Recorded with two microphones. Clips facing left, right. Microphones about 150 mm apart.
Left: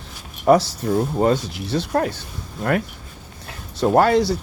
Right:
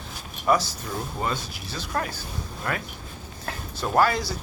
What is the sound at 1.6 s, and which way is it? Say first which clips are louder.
Speech: left 12 dB; 70° left (ahead or behind).